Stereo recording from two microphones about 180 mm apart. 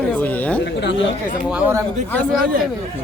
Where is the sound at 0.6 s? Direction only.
75° left (ahead or behind).